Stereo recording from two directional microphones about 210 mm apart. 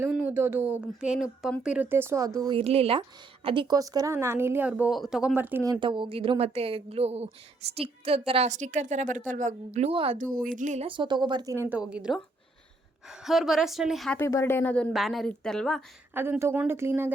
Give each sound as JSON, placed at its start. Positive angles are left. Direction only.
{"t": 0.0, "sound": "speech", "side_deg": -5}
{"t": 2.4, "sound": "a woman's voice", "side_deg": -25}
{"t": 5.8, "sound": "a woman's voice", "side_deg": -25}
{"t": 10.3, "sound": "a woman's voice", "side_deg": -40}
{"t": 16.1, "sound": "speech", "side_deg": -10}